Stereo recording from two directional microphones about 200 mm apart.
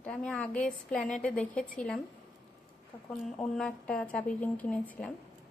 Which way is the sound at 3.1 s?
Centre (ahead or behind).